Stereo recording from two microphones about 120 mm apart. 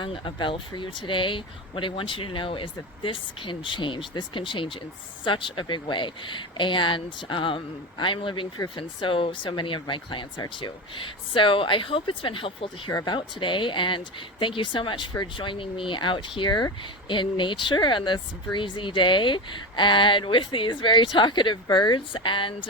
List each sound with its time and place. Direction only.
0.0 s speech: 45° left (ahead or behind)
12.9 s speech: 30° left (ahead or behind)
13.1 s speech: 45° left (ahead or behind)